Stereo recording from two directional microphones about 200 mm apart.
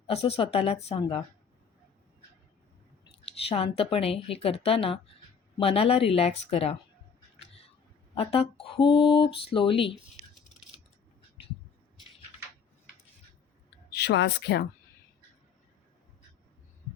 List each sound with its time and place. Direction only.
0.1 s speech: 30° left (ahead or behind)
3.5 s speech: 30° left (ahead or behind)
8.1 s speech: 30° left (ahead or behind)
13.9 s speech: 55° left (ahead or behind)